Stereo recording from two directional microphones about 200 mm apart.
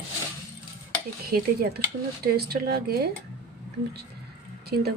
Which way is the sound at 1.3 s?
50° right (ahead or behind).